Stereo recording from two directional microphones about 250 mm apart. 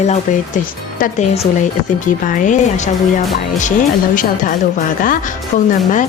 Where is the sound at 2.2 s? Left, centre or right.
Left.